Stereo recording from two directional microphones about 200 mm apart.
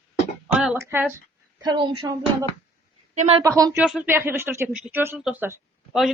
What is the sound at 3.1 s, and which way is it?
Speech, 35° right (ahead or behind).